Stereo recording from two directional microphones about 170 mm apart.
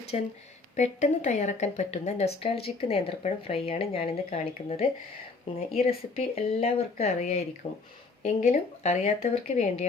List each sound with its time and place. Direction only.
0.1 s a woman's voice: 35° left (ahead or behind)